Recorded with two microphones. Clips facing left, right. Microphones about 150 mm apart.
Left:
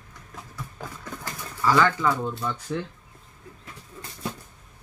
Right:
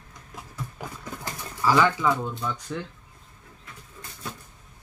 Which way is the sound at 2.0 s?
Centre (ahead or behind).